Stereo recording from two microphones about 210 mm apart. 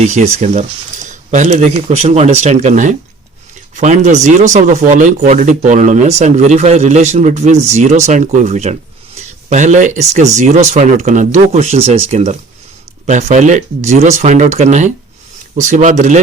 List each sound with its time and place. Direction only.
0.0 s speech: 35° right (ahead or behind)